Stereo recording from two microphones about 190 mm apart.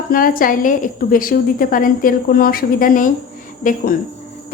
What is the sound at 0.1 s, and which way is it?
Speech, 50° left (ahead or behind).